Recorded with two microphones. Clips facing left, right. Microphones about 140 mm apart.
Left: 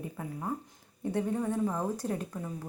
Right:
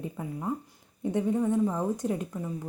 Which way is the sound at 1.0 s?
15° right (ahead or behind).